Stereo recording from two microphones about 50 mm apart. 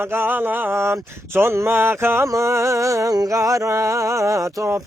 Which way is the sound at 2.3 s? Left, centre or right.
Right.